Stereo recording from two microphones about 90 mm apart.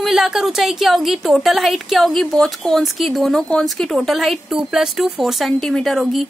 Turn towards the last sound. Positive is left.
turn(degrees=0)  # may be behind; listen again after turning